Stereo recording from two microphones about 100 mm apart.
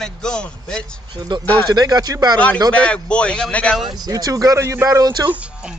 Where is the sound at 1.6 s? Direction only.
40° right (ahead or behind).